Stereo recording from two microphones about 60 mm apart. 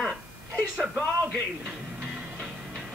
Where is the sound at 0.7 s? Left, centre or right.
Centre.